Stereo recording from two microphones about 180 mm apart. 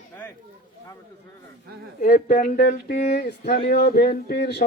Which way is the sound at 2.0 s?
50° left (ahead or behind).